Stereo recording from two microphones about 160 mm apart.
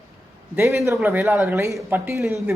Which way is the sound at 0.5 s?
15° right (ahead or behind).